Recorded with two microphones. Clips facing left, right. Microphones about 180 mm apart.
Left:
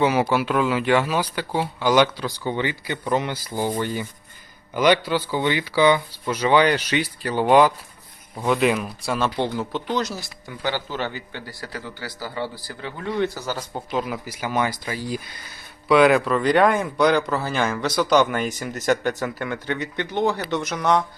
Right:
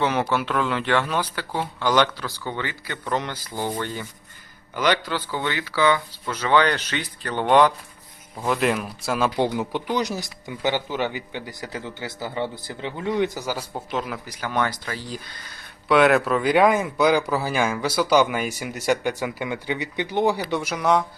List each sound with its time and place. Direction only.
0.0 s speech: 10° left (ahead or behind); by 13.8 s 10° right (ahead or behind)
13.9 s speech: 5° left (ahead or behind)